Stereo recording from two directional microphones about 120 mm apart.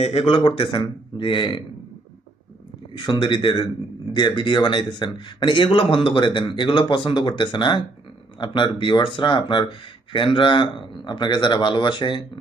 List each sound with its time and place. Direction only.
0.0 s a man's voice: 55° left (ahead or behind)
2.9 s a man's voice: 40° left (ahead or behind)